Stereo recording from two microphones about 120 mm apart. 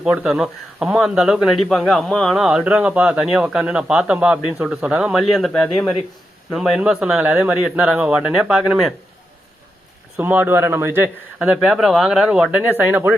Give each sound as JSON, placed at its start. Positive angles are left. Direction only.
{"t": 0.0, "sound": "speech", "side_deg": -10}
{"t": 10.2, "sound": "speech", "side_deg": -15}
{"t": 11.4, "sound": "speech", "side_deg": -5}